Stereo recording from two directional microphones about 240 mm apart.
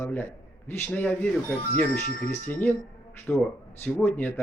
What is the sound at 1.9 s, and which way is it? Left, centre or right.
Speech, left.